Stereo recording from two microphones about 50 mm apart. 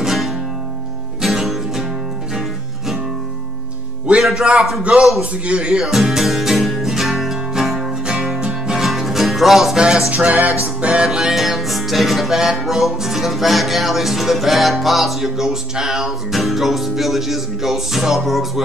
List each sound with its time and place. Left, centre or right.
0.0 s music: centre
4.1 s music: right
4.4 s a man's voice: right
5.9 s music: centre
10.1 s music: right
11.1 s music: centre